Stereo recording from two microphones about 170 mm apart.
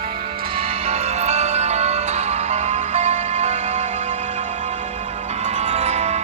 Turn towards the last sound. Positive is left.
turn(degrees=-40)  # may be behind; listen again after turning